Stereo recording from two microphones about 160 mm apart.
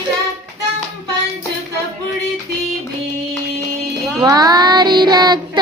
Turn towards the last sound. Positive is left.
turn(degrees=-25)  # may be behind; listen again after turning